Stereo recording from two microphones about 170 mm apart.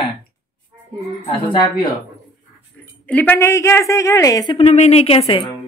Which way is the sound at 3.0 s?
10° left (ahead or behind).